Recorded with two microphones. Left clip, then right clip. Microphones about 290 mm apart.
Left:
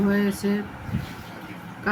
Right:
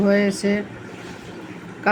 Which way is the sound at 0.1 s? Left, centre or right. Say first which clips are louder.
Right 6 dB; centre.